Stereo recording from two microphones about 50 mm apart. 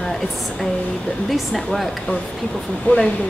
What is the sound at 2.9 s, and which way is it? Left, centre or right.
Speech, left.